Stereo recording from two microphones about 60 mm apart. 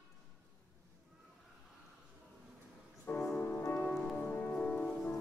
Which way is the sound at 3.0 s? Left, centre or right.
Left.